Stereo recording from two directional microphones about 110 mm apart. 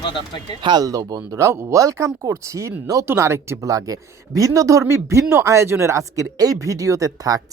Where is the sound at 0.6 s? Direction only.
35° right (ahead or behind).